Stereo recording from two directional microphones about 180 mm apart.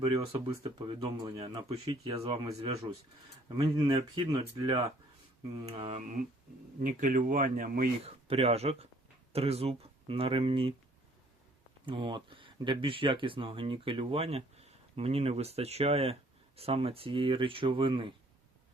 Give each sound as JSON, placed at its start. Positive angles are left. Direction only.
{"t": 0.0, "sound": "speech", "side_deg": -30}
{"t": 3.6, "sound": "speech", "side_deg": -30}
{"t": 6.0, "sound": "a man's voice", "side_deg": -45}
{"t": 8.0, "sound": "speech", "side_deg": -35}
{"t": 11.9, "sound": "speech", "side_deg": -30}